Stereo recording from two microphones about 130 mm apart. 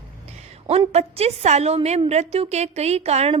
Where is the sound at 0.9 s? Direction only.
55° right (ahead or behind).